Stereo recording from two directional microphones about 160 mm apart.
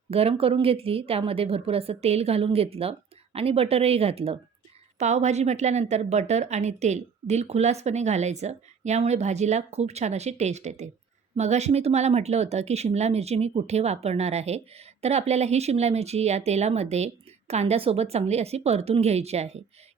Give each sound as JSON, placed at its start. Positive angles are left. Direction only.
{"t": 0.1, "sound": "a woman's voice", "side_deg": -35}